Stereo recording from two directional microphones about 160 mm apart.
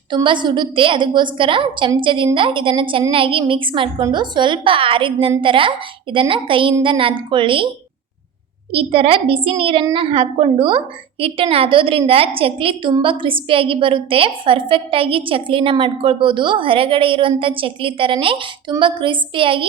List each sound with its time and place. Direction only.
0.1 s a woman's voice: 30° right (ahead or behind)
8.7 s a woman's voice: 35° right (ahead or behind)